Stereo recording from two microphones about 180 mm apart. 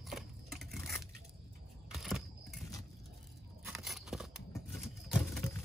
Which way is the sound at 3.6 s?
Centre (ahead or behind).